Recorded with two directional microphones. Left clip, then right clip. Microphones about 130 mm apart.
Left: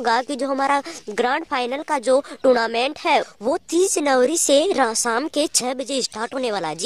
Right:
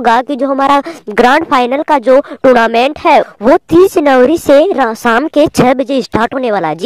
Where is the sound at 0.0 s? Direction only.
45° right (ahead or behind).